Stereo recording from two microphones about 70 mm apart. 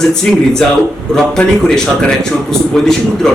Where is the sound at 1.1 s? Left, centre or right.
Centre.